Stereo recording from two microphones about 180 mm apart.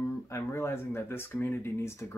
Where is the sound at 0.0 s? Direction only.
15° left (ahead or behind).